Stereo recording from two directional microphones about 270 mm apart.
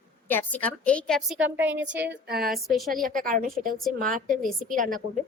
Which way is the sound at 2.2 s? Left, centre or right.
Right.